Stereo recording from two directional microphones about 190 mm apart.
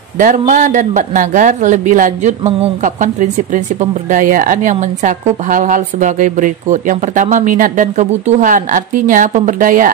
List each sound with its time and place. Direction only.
0.2 s speech: 40° right (ahead or behind)